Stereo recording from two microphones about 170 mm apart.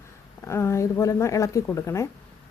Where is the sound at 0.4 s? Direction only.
15° left (ahead or behind).